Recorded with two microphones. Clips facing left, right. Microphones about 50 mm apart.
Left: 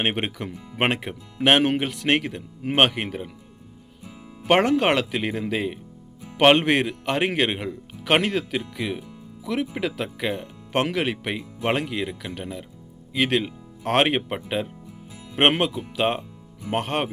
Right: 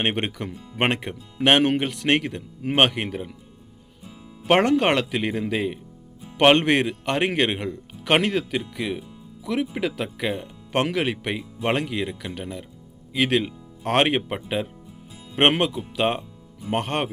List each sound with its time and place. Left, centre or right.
0.0 s speech: centre
0.5 s speech: left
0.8 s speech: centre
4.4 s speech: centre